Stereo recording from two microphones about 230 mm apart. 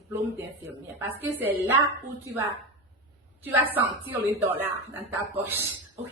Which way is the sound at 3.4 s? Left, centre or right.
Centre.